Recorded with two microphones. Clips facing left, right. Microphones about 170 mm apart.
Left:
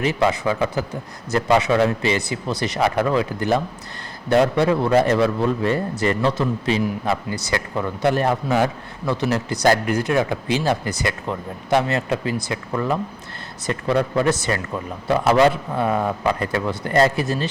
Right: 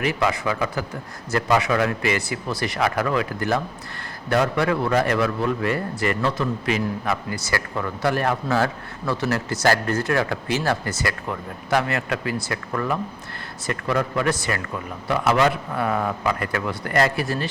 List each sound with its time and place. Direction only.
0.0 s a man's voice: 25° left (ahead or behind)